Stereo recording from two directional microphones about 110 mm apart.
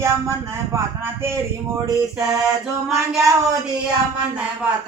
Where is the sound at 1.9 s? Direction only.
30° right (ahead or behind).